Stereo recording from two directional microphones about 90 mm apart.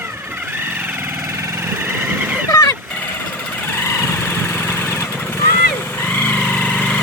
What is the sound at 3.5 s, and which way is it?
Vehicle, 20° left (ahead or behind).